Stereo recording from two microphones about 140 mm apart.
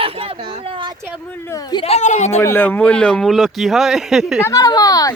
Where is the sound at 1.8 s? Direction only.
55° left (ahead or behind).